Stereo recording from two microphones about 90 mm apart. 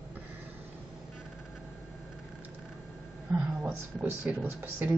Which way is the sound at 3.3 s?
15° right (ahead or behind).